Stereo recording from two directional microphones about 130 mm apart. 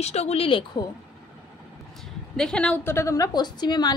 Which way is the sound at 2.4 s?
5° left (ahead or behind).